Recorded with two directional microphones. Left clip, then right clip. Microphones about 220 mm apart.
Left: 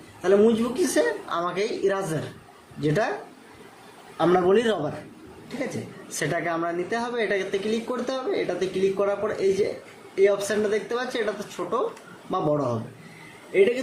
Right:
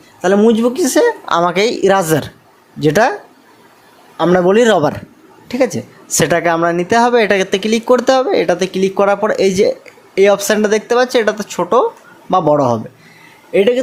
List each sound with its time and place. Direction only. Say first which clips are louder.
0.2 s a woman's voice: right 8 dB; 40° right (ahead or behind)
4.2 s a man's voice: right 9 dB; 40° right (ahead or behind)